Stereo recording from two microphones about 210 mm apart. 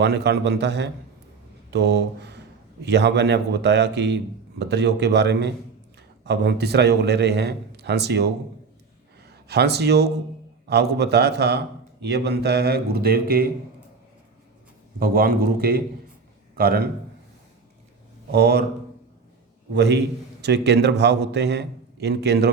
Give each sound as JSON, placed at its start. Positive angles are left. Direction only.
{"t": 0.0, "sound": "a man's voice", "side_deg": -55}
{"t": 14.9, "sound": "a man's voice", "side_deg": -45}
{"t": 18.3, "sound": "a man's voice", "side_deg": -50}
{"t": 19.7, "sound": "a man's voice", "side_deg": -55}